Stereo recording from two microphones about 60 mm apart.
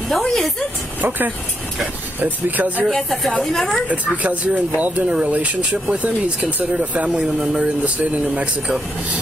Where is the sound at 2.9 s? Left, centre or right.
Centre.